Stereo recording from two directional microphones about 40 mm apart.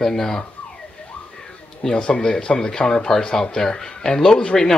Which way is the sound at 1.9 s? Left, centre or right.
Left.